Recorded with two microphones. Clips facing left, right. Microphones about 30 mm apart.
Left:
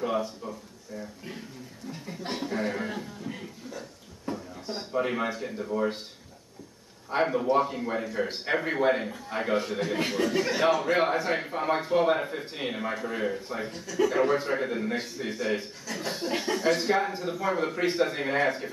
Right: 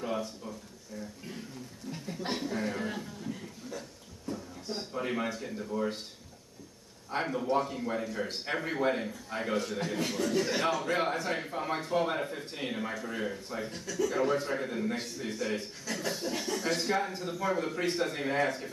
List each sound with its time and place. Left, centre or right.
0.0 s a sound: centre
1.9 s speech: centre
2.4 s speech: centre
4.3 s a sound: left
4.6 s speech: centre
7.1 s a man's voice: centre
13.7 s speech: centre
14.0 s a man's voice: left
16.3 s speech: left
16.5 s a man's voice: left